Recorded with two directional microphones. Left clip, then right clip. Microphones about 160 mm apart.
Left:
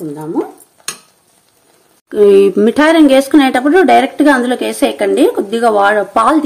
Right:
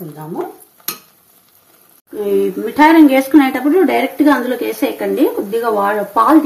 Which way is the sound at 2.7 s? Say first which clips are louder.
Right 3 dB; 50° left (ahead or behind).